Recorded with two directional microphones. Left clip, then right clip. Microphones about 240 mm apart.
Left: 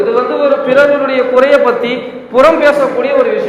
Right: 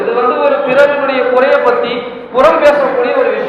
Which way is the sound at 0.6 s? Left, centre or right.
Left.